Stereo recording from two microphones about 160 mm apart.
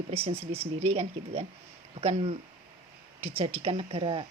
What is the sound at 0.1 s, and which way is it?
A woman's voice, 35° right (ahead or behind).